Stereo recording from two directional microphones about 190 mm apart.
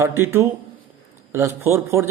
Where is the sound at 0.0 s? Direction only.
15° right (ahead or behind).